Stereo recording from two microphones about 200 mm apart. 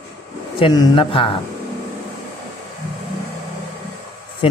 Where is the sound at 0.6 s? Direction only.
20° left (ahead or behind).